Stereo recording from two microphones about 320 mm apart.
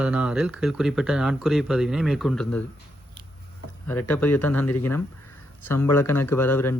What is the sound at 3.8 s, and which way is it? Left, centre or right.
Speech, centre.